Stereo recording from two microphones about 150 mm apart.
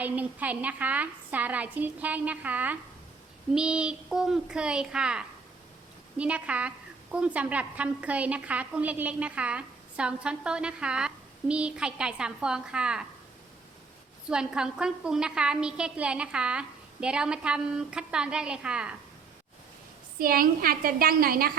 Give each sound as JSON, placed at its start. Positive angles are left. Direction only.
{"t": 0.0, "sound": "a woman's voice", "side_deg": -10}
{"t": 14.3, "sound": "a woman's voice", "side_deg": -5}
{"t": 20.1, "sound": "a woman's voice", "side_deg": -75}